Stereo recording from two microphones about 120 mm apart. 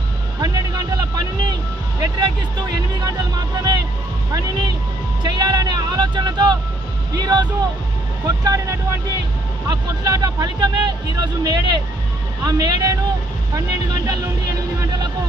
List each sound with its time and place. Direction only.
0.4 s music: 35° right (ahead or behind)
2.0 s speech: 40° right (ahead or behind)
8.4 s speech: 30° right (ahead or behind)